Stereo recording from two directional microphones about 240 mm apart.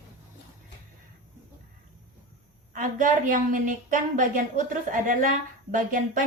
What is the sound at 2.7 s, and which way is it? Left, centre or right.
A woman's voice, right.